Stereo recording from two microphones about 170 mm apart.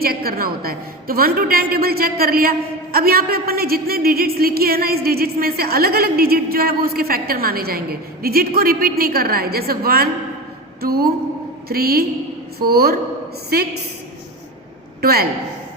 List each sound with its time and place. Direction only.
0.0 s a woman's voice: 60° right (ahead or behind)
15.0 s a woman's voice: 65° right (ahead or behind)